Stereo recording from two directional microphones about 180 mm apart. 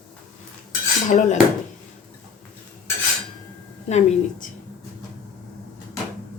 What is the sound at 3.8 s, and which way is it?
Speech, 40° left (ahead or behind).